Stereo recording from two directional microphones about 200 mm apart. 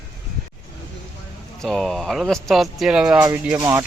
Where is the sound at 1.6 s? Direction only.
Centre (ahead or behind); by 3.8 s 15° right (ahead or behind).